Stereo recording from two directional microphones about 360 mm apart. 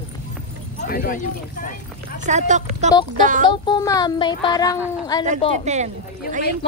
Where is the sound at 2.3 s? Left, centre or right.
Centre.